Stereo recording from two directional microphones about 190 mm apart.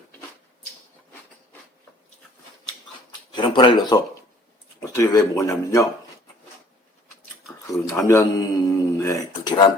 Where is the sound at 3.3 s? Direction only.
25° left (ahead or behind).